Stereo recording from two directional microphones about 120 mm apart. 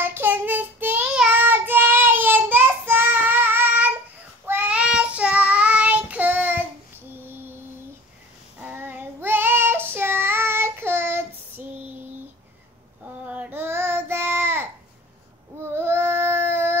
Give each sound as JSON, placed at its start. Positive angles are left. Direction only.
{"t": 0.0, "sound": "child singing", "side_deg": -15}
{"t": 8.5, "sound": "child singing", "side_deg": -15}
{"t": 13.2, "sound": "child singing", "side_deg": -10}
{"t": 15.7, "sound": "a sound", "side_deg": -20}